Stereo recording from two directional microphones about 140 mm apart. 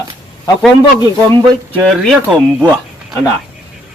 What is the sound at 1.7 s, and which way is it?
Speech, centre (ahead or behind).